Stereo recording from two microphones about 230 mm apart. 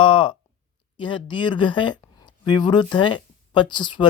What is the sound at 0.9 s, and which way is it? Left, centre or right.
Speech, left.